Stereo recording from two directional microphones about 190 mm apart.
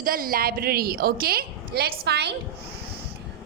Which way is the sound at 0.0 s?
50° right (ahead or behind).